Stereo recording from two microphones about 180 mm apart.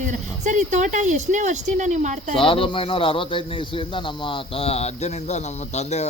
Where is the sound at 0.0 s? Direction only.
45° right (ahead or behind).